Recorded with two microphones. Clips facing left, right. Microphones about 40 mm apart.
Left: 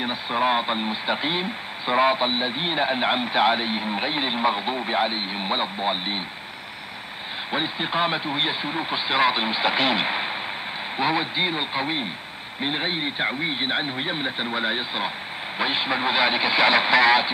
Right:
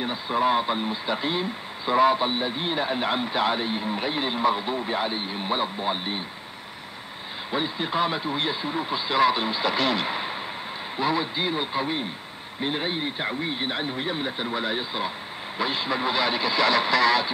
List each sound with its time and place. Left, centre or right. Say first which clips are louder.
0.0 s speech: left 1 dB; left
7.5 s speech: left 1 dB; left